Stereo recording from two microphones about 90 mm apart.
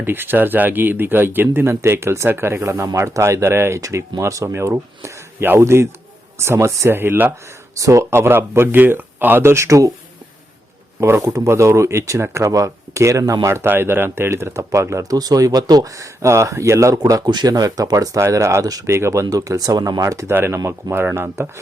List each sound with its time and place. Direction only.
0.0 s speech: 25° right (ahead or behind)
7.8 s speech: 35° right (ahead or behind)
11.0 s speech: 35° right (ahead or behind)
20.6 s speech: 45° right (ahead or behind)
20.9 s speech: 25° right (ahead or behind)